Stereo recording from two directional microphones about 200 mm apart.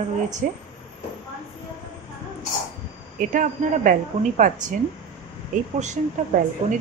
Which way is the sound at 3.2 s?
40° right (ahead or behind).